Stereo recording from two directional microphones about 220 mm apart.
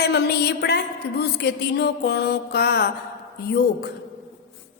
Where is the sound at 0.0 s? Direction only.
50° left (ahead or behind).